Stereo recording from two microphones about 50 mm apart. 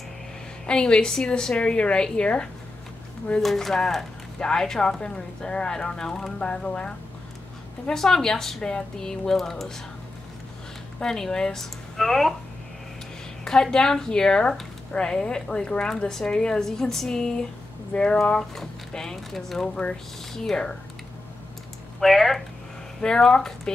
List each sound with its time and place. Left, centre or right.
0.7 s speech: centre
3.3 s speech: centre; by 7.0 s left
7.8 s speech: centre
11.0 s speech: centre
13.4 s speech: centre
22.0 s speech: centre
22.9 s speech: centre